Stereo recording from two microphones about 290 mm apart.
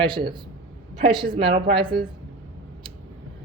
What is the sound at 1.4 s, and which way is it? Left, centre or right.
Speech, centre.